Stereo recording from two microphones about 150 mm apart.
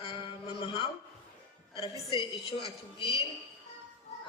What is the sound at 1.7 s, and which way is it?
A woman's voice, 35° left (ahead or behind).